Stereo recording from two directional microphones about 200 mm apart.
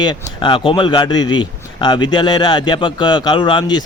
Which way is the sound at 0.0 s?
20° left (ahead or behind).